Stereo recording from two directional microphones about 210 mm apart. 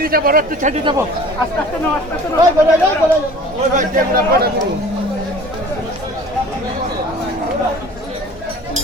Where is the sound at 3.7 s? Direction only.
40° right (ahead or behind).